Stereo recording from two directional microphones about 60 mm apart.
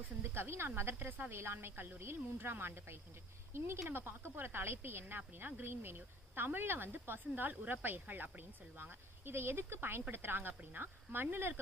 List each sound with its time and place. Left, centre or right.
0.2 s a woman's voice: right